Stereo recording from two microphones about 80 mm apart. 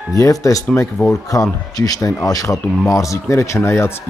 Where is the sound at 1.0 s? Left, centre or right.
Left.